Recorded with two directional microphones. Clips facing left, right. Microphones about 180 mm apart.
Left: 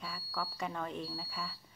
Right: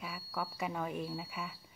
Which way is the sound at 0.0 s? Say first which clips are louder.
Right 1 dB; 10° right (ahead or behind).